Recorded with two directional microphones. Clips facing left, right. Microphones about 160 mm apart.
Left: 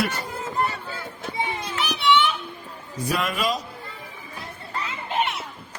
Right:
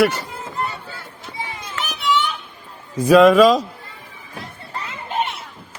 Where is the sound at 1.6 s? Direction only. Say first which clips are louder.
Even; 45° right (ahead or behind).